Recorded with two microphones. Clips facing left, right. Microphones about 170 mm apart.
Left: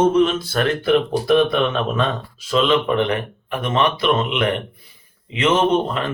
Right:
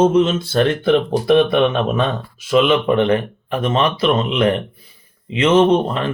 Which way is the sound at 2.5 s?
10° right (ahead or behind).